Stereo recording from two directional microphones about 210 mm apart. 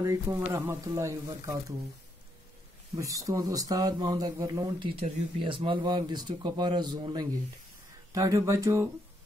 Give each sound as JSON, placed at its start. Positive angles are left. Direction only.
{"t": 0.0, "sound": "speech", "side_deg": -15}
{"t": 3.0, "sound": "speech", "side_deg": -15}